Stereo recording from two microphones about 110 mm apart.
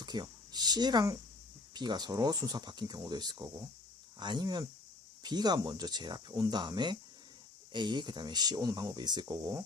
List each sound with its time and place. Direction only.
0.0 s speech: 40° right (ahead or behind)